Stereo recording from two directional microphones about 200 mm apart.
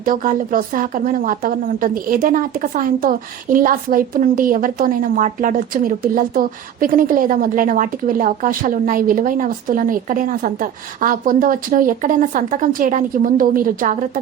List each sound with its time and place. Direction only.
0.0 s a woman's voice: 45° right (ahead or behind)